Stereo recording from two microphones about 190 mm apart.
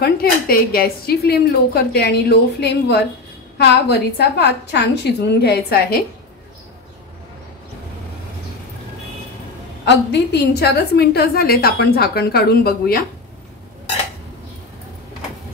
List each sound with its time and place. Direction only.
0.0 s a woman's voice: 50° left (ahead or behind)
9.8 s a woman's voice: 65° left (ahead or behind)